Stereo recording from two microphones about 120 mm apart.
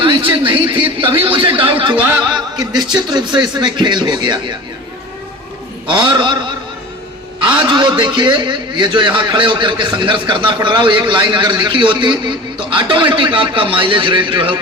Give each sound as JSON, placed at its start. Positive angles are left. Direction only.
{"t": 0.0, "sound": "a sound", "side_deg": -45}
{"t": 1.2, "sound": "speech", "side_deg": -50}
{"t": 5.9, "sound": "speech", "side_deg": -40}
{"t": 7.7, "sound": "speech", "side_deg": -40}